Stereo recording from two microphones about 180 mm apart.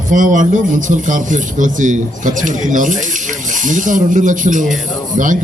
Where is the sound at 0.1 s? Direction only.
45° right (ahead or behind).